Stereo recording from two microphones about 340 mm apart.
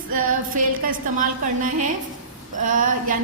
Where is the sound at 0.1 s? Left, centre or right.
Right.